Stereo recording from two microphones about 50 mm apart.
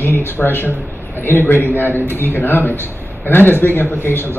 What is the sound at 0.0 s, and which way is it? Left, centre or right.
A man's voice, left.